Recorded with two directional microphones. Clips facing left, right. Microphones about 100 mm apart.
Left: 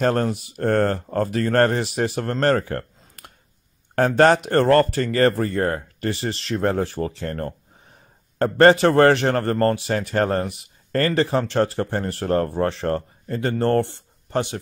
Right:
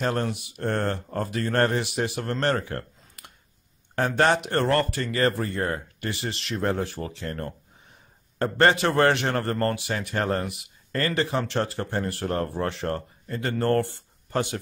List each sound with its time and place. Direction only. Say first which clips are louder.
0.0 s a man's voice: left 6 dB; 45° left (ahead or behind); by 14.6 s 25° left (ahead or behind)